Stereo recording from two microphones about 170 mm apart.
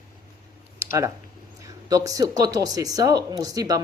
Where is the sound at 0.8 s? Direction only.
20° right (ahead or behind).